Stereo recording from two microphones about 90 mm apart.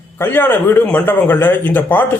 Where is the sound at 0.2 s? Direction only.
25° left (ahead or behind).